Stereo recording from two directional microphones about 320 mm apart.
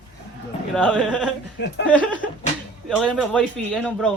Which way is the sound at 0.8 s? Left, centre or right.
Centre.